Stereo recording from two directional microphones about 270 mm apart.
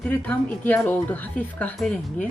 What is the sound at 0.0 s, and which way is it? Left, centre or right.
Speech, centre.